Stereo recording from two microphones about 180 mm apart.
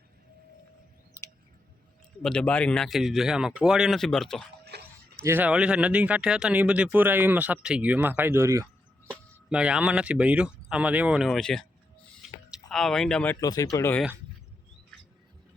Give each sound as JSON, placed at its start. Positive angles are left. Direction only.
{"t": 2.2, "sound": "speech", "side_deg": 5}
{"t": 4.6, "sound": "a sound", "side_deg": -65}
{"t": 5.2, "sound": "speech", "side_deg": -10}
{"t": 13.4, "sound": "speech", "side_deg": 20}